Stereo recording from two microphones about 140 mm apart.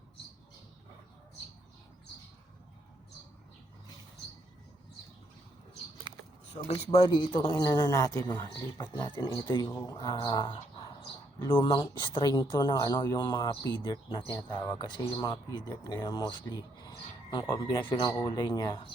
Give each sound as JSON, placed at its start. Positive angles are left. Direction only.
{"t": 6.7, "sound": "speech", "side_deg": 40}
{"t": 7.6, "sound": "speech", "side_deg": 20}
{"t": 11.5, "sound": "speech", "side_deg": 35}